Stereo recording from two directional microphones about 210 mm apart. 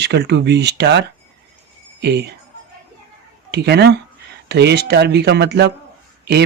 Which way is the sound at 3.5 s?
55° right (ahead or behind).